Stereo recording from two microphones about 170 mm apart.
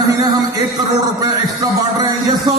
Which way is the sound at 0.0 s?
25° right (ahead or behind).